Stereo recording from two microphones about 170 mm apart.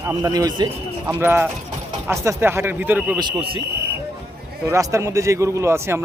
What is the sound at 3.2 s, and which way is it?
Speech, 30° right (ahead or behind).